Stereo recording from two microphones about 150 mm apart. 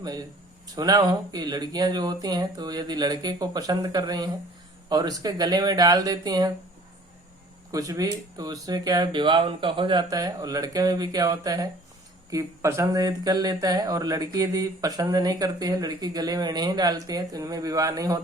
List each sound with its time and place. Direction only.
0.0 s speech: 25° right (ahead or behind)
7.7 s speech: 20° right (ahead or behind)